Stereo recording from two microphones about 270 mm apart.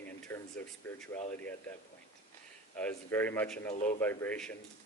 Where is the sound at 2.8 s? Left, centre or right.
Centre.